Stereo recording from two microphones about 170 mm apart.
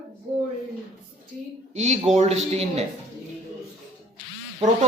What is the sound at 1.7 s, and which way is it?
A man's voice, 40° right (ahead or behind).